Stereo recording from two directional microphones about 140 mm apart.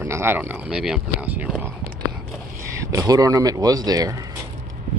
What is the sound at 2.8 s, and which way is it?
Speech, 25° right (ahead or behind).